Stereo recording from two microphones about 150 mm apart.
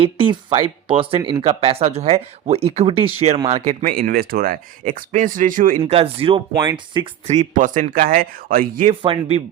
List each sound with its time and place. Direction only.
0.0 s speech: 35° right (ahead or behind); by 5.8 s 65° right (ahead or behind)
5.8 s speech: 40° right (ahead or behind)
7.3 s speech: 55° right (ahead or behind)
8.9 s speech: 40° right (ahead or behind)